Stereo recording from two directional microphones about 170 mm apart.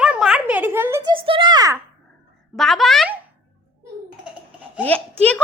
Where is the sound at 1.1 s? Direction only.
30° right (ahead or behind).